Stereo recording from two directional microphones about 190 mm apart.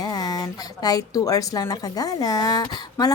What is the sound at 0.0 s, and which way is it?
A woman's voice, 20° left (ahead or behind).